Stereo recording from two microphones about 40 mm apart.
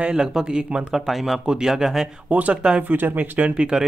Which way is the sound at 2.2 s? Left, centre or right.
Right.